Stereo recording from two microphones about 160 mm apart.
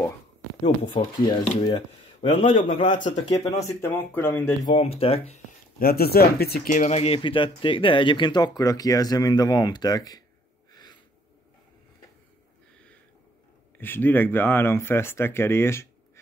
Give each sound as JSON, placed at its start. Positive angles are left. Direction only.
{"t": 0.9, "sound": "speech", "side_deg": 30}
{"t": 2.2, "sound": "a man's voice", "side_deg": 40}
{"t": 3.0, "sound": "speech", "side_deg": 50}
{"t": 3.4, "sound": "speech", "side_deg": 15}
{"t": 4.6, "sound": "a man's voice", "side_deg": 35}
{"t": 5.8, "sound": "speech", "side_deg": 70}
{"t": 6.7, "sound": "speech", "side_deg": 45}
{"t": 10.7, "sound": "a sound", "side_deg": 25}
{"t": 13.7, "sound": "speech", "side_deg": 10}